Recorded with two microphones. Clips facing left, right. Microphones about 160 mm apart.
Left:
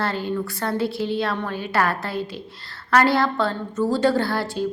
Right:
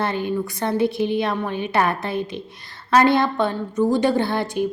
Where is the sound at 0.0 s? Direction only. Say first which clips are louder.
Right 2 dB; 20° right (ahead or behind).